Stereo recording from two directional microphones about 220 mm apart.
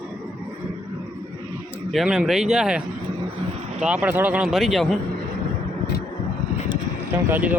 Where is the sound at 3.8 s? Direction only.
5° right (ahead or behind).